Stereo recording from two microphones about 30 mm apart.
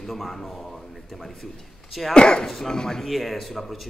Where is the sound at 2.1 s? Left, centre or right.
Left.